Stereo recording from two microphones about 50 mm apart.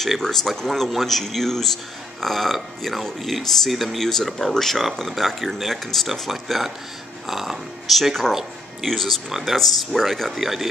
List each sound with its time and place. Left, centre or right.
0.0 s speech: centre